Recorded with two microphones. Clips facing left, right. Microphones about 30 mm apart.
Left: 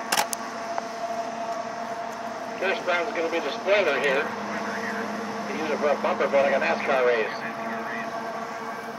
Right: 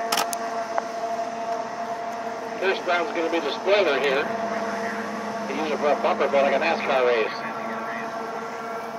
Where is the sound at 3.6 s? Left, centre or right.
Centre.